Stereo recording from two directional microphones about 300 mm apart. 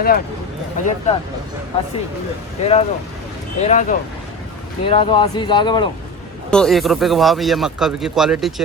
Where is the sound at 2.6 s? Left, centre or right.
Left.